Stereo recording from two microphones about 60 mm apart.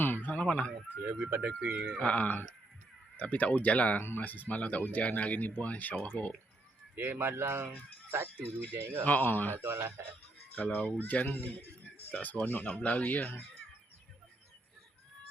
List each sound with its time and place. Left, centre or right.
0.0 s a sound: left
0.3 s a sound: left
1.0 s speech: right
2.0 s speech: left
4.0 s speech: left
6.9 s speech: right
9.0 s speech: left
9.5 s speech: right
10.5 s speech: left